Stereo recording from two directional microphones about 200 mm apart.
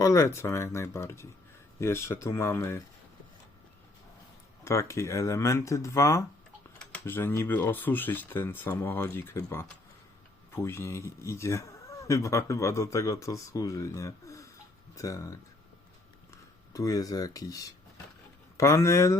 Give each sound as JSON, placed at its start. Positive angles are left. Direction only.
{"t": 0.0, "sound": "speech", "side_deg": 15}
{"t": 4.6, "sound": "speech", "side_deg": 15}
{"t": 16.7, "sound": "speech", "side_deg": 15}